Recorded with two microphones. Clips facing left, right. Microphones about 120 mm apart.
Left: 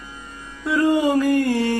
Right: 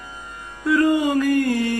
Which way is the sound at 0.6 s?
25° left (ahead or behind).